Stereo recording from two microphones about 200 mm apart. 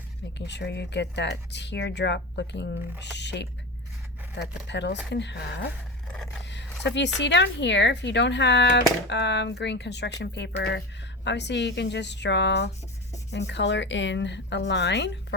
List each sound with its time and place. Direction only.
0.3 s speech: 60° left (ahead or behind)
6.4 s zipper: 60° left (ahead or behind)
6.8 s speech: 60° left (ahead or behind)